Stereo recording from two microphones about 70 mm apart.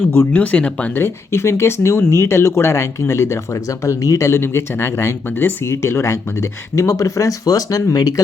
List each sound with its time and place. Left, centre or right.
0.3 s speech: left
0.9 s speech: left